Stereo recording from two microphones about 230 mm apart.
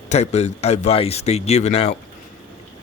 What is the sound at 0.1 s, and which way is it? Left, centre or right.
Speech, left.